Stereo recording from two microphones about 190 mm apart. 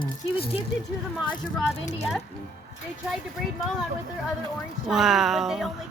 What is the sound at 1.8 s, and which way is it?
Speech, 35° left (ahead or behind).